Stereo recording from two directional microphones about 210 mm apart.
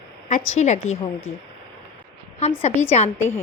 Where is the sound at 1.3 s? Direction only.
80° left.